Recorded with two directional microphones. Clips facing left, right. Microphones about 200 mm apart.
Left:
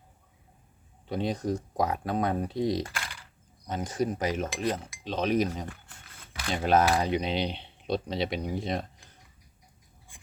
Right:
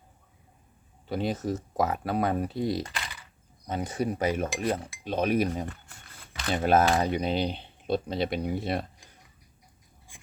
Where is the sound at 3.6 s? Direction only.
5° right (ahead or behind).